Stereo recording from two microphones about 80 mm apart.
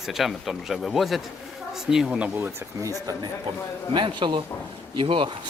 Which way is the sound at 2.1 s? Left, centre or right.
Right.